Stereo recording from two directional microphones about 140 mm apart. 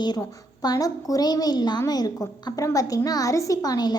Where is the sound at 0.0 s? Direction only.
30° left (ahead or behind).